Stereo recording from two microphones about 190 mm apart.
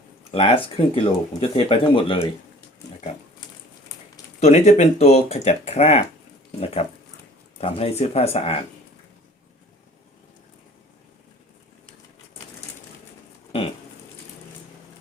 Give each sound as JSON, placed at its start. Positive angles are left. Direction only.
{"t": 0.3, "sound": "speech", "side_deg": 30}
{"t": 4.4, "sound": "speech", "side_deg": 35}